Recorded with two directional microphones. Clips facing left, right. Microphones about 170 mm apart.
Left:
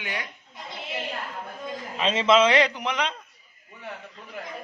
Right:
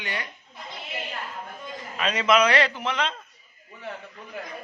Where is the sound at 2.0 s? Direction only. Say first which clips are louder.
Left 2 dB; 25° left (ahead or behind).